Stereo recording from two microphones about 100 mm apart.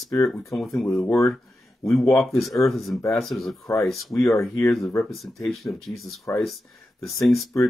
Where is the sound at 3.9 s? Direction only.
Centre (ahead or behind).